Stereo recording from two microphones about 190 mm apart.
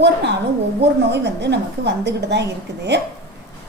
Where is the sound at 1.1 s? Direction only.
65° right (ahead or behind).